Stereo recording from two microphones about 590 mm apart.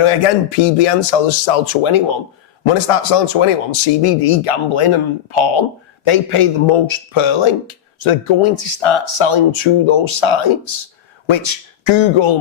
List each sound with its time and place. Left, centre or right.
0.0 s a man's voice: left